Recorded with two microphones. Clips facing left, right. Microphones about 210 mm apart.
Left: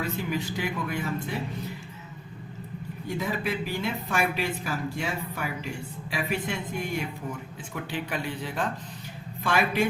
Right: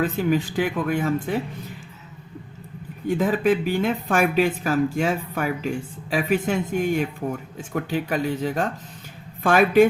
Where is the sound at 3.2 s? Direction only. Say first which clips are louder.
Right 9 dB; 50° right (ahead or behind).